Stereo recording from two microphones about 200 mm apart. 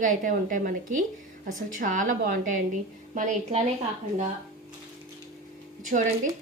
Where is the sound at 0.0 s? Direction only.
40° right (ahead or behind).